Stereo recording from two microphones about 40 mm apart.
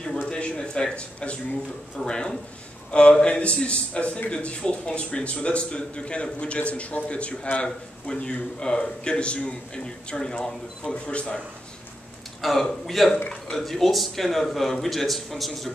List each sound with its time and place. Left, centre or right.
0.3 s a man's voice: left
0.9 s speech: left
2.0 s a man's voice: left
7.6 s a man's voice: left
12.4 s speech: centre